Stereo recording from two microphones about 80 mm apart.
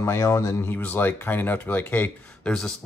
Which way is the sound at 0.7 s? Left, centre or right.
Left.